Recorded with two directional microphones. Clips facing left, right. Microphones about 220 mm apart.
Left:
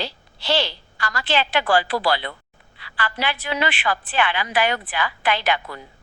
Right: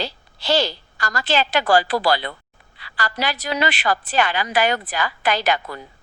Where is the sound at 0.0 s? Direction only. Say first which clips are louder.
Right 2 dB; 40° right (ahead or behind).